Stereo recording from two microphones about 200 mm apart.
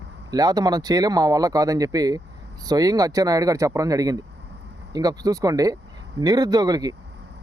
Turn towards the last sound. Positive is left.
turn(degrees=-20)  # may be behind; listen again after turning